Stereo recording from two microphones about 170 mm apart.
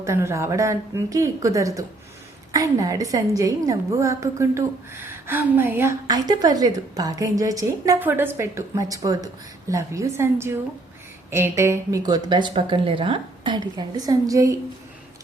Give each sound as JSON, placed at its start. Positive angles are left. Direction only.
{"t": 0.0, "sound": "a woman's voice", "side_deg": -15}